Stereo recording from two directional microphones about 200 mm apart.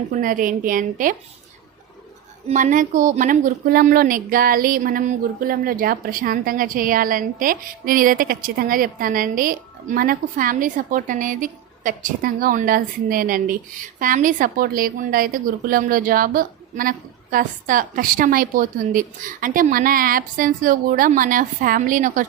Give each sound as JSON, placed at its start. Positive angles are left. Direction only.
{"t": 0.1, "sound": "a woman's voice", "side_deg": -40}
{"t": 2.5, "sound": "a woman's voice", "side_deg": -40}